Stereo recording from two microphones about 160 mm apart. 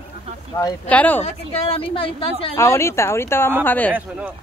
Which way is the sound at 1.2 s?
35° left (ahead or behind).